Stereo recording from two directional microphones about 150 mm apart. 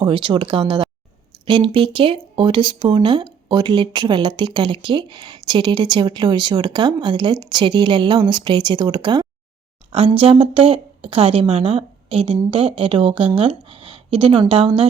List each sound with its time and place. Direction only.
0.0 s speech: 30° right (ahead or behind)